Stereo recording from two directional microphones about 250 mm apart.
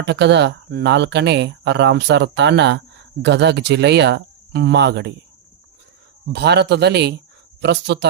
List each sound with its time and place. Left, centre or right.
0.0 s speech: right
6.3 s speech: right